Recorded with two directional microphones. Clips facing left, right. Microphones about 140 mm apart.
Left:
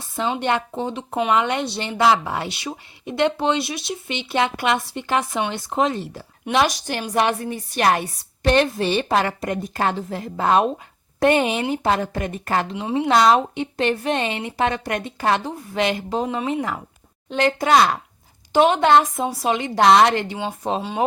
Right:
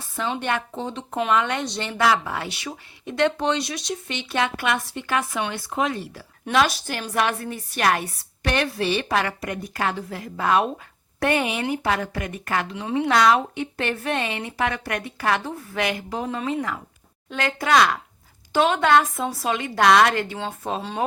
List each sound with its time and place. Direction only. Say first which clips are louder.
0.2 s a woman's voice: left 4 dB; 20° left (ahead or behind)
4.1 s a woman's voice: left 4 dB; 20° left (ahead or behind)
12.7 s a woman's voice: left 2 dB; 20° left (ahead or behind)